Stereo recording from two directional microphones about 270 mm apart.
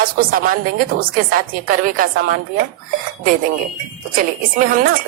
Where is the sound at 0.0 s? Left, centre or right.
Right.